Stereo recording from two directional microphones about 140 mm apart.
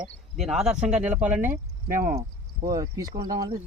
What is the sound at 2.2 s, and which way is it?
Speech, 25° right (ahead or behind).